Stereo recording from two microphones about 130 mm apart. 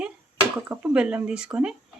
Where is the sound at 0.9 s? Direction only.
10° right (ahead or behind).